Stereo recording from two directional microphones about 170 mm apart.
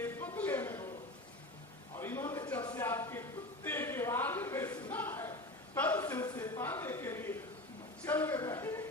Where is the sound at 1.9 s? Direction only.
15° left (ahead or behind).